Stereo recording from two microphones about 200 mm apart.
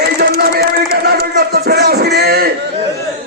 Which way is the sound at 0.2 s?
50° right (ahead or behind).